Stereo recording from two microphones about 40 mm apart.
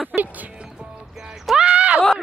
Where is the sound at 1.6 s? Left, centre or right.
Right.